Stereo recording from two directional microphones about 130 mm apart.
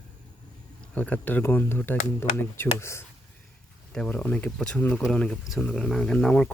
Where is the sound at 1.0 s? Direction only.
10° left (ahead or behind).